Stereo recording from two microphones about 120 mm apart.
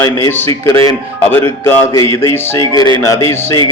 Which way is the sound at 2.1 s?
20° left (ahead or behind).